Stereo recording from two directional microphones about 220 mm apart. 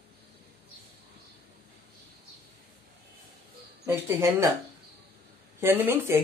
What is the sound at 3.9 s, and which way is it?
Speech, 10° right (ahead or behind).